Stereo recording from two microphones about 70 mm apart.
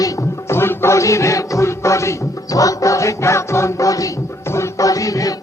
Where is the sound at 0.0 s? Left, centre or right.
Left.